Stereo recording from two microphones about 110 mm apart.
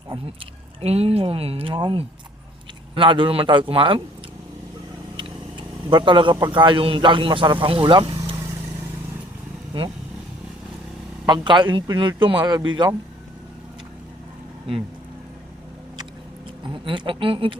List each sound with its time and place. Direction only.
0.8 s speech: 70° right (ahead or behind)
5.1 s speech: 45° right (ahead or behind)
11.3 s speech: 45° right (ahead or behind)
16.6 s speech: 50° right (ahead or behind)